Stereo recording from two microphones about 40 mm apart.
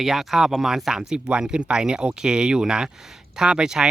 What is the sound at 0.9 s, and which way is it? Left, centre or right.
Speech, right.